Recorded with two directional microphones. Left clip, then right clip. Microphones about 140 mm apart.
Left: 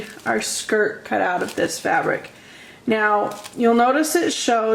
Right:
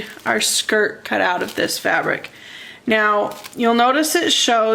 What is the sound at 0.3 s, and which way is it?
Speech, 45° right (ahead or behind).